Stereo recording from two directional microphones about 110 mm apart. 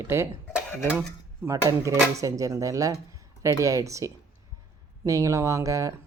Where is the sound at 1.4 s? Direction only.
30° right (ahead or behind).